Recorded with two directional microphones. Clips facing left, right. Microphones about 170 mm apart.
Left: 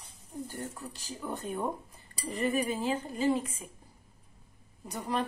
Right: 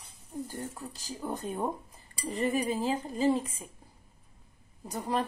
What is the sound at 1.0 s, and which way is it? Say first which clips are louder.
A woman's voice: right 2 dB; 35° right (ahead or behind).